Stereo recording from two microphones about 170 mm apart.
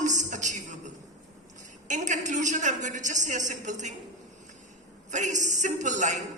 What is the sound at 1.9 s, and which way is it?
A man's voice, 45° right (ahead or behind).